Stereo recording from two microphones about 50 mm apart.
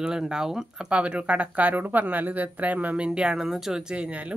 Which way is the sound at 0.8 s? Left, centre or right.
Right.